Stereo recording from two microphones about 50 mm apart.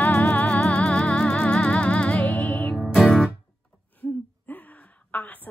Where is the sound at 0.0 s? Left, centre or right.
Left.